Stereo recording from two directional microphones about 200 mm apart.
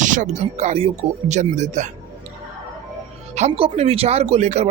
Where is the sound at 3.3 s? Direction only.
30° right (ahead or behind).